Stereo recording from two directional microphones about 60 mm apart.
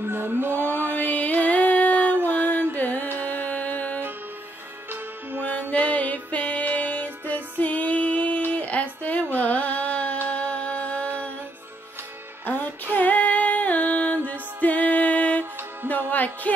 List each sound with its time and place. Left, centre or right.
0.0 s music: right
0.9 s music: left
5.4 s music: left
8.5 s a sound: left
9.4 s carnatic music: left
10.2 s music: left
12.5 s music: left